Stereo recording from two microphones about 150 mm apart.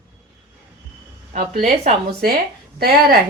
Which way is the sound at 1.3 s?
50° right (ahead or behind).